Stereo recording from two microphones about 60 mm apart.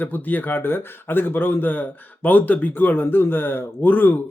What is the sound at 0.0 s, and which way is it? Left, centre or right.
A man's voice, left.